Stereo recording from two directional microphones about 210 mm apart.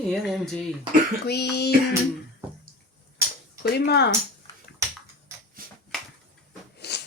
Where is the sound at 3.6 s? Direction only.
50° left (ahead or behind).